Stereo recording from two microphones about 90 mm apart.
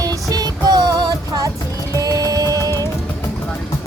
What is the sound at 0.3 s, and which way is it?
Music, 45° right (ahead or behind).